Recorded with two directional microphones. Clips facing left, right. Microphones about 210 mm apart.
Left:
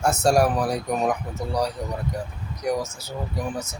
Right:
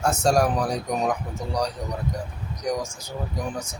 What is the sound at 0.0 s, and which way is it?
Speech, 10° left (ahead or behind).